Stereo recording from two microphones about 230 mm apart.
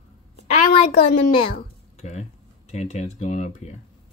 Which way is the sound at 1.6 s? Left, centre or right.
Left.